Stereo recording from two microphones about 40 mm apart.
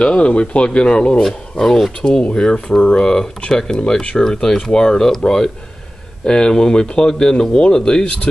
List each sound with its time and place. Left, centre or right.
0.0 s speech: left
2.5 s speech: left
3.0 s speech: centre